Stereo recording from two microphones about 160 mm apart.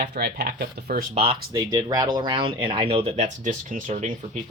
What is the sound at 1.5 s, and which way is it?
Speech, 25° right (ahead or behind).